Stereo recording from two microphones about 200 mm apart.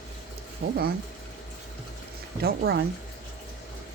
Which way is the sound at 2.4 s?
55° right (ahead or behind).